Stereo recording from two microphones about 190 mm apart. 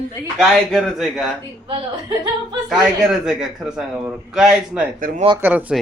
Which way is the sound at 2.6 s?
Centre (ahead or behind).